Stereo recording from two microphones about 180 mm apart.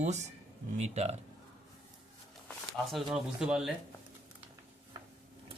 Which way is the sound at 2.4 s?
Centre (ahead or behind).